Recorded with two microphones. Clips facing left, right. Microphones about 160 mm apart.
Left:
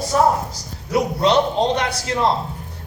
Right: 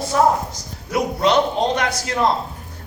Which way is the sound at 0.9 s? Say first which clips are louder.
Left 1 dB; 30° left (ahead or behind).